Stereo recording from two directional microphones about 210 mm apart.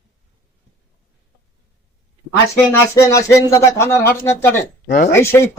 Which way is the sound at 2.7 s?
15° left (ahead or behind).